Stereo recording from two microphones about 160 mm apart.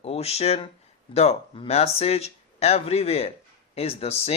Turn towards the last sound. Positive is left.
turn(degrees=40)  # may be behind; listen again after turning